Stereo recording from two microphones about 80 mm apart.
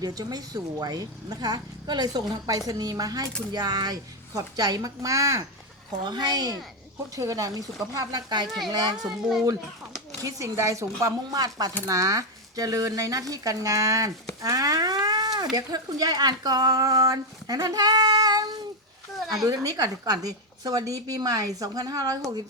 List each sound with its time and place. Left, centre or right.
0.0 s a woman's voice: right
6.1 s a woman's voice: right
8.4 s a child's voice: centre
8.7 s a child's voice: right
10.2 s a woman's voice: right
14.4 s a sound: right
15.5 s a woman's voice: right
19.5 s a woman's voice: right